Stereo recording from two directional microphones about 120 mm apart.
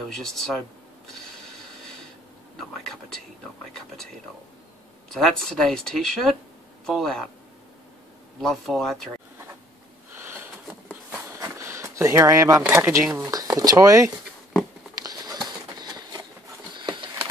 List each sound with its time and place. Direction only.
0.0 s speech: 5° left (ahead or behind)
5.1 s speech: centre (ahead or behind)
8.4 s speech: centre (ahead or behind)
10.1 s sniff: 20° right (ahead or behind)
11.3 s speech: 25° right (ahead or behind)
13.3 s speech: 30° right (ahead or behind)
15.0 s a sound: 30° right (ahead or behind)
15.4 s bird: 35° right (ahead or behind)
16.7 s a sound: 40° right (ahead or behind)